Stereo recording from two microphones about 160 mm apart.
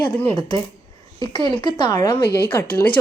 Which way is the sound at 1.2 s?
30° left (ahead or behind).